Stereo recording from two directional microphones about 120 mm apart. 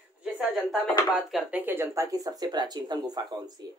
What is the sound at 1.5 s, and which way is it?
Speech, 20° right (ahead or behind).